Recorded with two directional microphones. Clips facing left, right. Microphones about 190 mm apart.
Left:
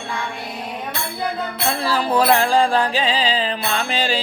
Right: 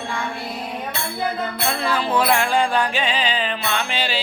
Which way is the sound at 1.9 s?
40° left (ahead or behind).